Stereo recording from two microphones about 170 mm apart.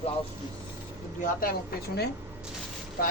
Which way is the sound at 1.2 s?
60° left (ahead or behind).